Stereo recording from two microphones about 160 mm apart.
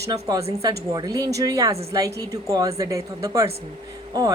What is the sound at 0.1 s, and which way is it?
A woman's voice, 25° right (ahead or behind).